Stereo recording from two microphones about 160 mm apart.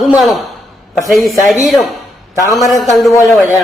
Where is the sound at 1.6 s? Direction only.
Centre (ahead or behind).